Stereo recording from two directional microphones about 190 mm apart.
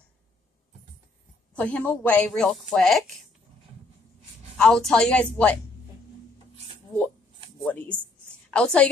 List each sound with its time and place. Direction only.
1.5 s speech: 10° left (ahead or behind)
4.6 s a woman's voice: 5° left (ahead or behind)
7.6 s a woman's voice: 10° left (ahead or behind)